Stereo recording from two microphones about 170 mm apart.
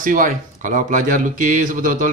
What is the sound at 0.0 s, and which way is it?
Speech, 50° right (ahead or behind).